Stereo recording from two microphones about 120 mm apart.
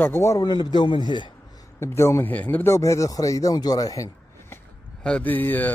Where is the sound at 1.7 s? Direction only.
20° left (ahead or behind).